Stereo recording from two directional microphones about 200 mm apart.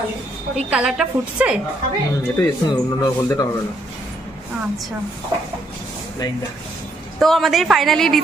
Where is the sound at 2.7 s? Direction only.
20° left (ahead or behind).